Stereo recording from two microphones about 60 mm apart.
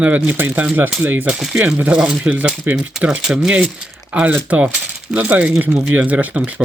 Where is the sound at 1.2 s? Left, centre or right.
Centre.